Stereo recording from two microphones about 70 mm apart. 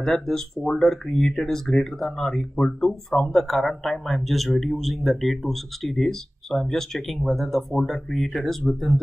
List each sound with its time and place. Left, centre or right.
0.0 s speech: centre